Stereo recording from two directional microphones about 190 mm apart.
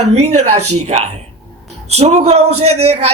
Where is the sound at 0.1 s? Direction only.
35° right (ahead or behind).